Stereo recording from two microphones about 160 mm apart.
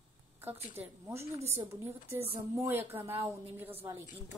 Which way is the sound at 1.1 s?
15° right (ahead or behind).